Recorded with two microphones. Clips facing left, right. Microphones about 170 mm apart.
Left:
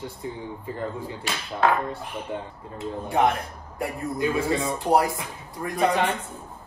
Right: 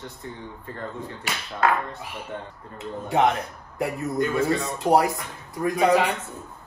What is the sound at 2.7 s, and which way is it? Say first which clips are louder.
Speech: right 1 dB; 20° right (ahead or behind).